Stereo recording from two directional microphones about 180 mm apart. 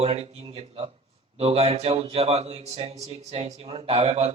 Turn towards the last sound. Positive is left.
turn(degrees=-35)  # may be behind; listen again after turning